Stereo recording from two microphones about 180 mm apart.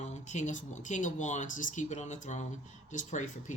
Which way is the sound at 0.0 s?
40° left (ahead or behind).